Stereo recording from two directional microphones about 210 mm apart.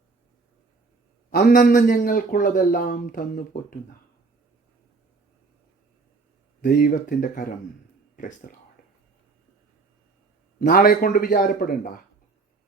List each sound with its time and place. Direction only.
1.3 s a man's voice: 40° left (ahead or behind)
6.6 s a man's voice: 45° left (ahead or behind)
8.4 s a man's voice: 45° left (ahead or behind)
10.6 s a man's voice: 45° left (ahead or behind)